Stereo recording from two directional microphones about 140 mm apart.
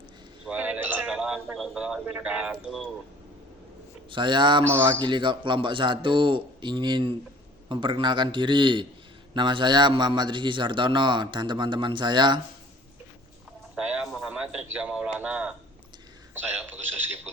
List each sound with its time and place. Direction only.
0.4 s speech: 10° right (ahead or behind)
4.1 s a man's voice: 35° right (ahead or behind)
13.7 s a sound: 5° right (ahead or behind)
14.1 s a man's voice: 5° right (ahead or behind)